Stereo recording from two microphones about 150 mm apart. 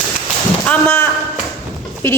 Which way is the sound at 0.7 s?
15° left (ahead or behind).